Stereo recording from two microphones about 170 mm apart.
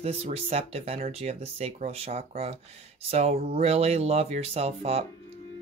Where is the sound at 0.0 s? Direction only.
35° right (ahead or behind).